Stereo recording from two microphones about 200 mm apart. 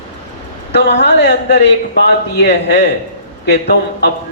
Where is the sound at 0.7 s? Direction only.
60° left (ahead or behind).